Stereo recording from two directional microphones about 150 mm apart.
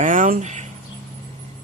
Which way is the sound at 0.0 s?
60° right (ahead or behind).